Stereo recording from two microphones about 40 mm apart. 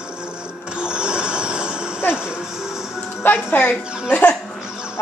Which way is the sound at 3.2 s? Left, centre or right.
Left.